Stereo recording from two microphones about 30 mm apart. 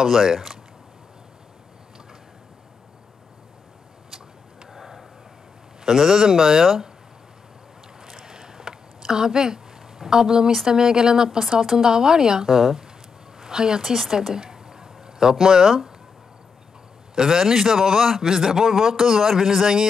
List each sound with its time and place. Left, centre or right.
0.0 s a man's voice: centre
4.1 s vehicle: centre
5.9 s a man's voice: centre
8.0 s a sound: centre
10.7 s speech: right
11.2 s a man's voice: centre
14.3 s a sound: centre
17.1 s a man's voice: centre